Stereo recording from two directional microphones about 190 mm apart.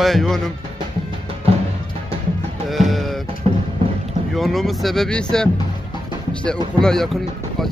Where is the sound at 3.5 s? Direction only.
30° right (ahead or behind).